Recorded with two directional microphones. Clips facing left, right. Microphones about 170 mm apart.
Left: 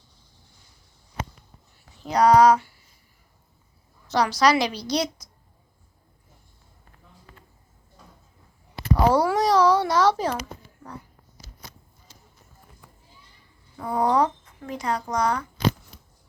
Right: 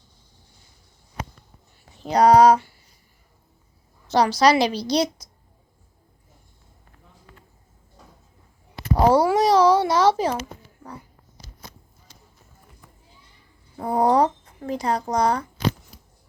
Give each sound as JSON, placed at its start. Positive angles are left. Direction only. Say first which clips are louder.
{"t": 2.0, "sound": "a woman's voice", "louder": "right 2 dB", "side_deg": -30}
{"t": 4.1, "sound": "a woman's voice", "louder": "right 3 dB", "side_deg": -30}
{"t": 9.0, "sound": "a child's voice", "louder": "right 3 dB", "side_deg": -25}
{"t": 13.7, "sound": "speech", "louder": "right 3 dB", "side_deg": -35}